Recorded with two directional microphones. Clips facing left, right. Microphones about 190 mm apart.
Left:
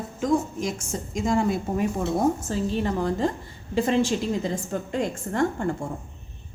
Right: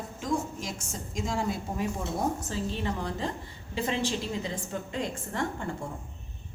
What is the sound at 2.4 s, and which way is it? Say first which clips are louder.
A woman's voice: left 6 dB; 45° left (ahead or behind).